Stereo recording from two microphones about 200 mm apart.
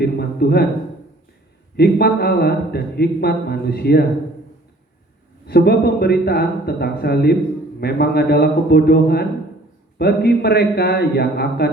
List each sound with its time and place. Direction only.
0.0 s a man's voice: 55° left (ahead or behind)
1.7 s a man's voice: 55° left (ahead or behind)
5.5 s a man's voice: 55° left (ahead or behind)